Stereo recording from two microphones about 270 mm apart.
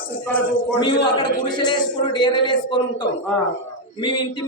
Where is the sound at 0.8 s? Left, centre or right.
Centre.